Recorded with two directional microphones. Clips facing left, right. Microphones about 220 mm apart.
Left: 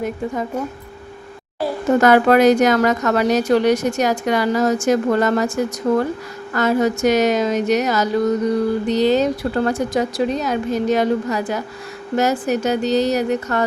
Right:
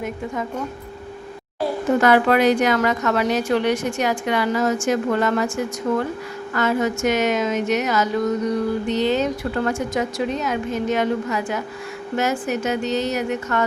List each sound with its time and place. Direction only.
2.0 s speech: 45° left (ahead or behind)